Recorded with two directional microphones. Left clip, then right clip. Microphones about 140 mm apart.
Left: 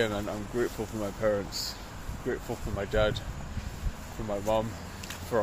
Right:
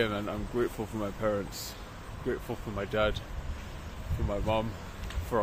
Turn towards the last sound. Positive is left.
turn(degrees=-10)  # may be behind; listen again after turning